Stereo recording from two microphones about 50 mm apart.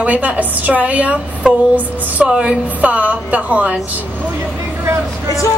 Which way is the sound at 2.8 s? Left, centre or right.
Right.